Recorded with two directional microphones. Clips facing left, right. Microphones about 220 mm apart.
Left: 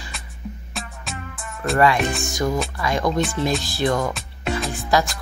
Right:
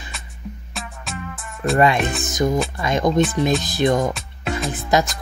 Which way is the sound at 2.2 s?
20° right (ahead or behind).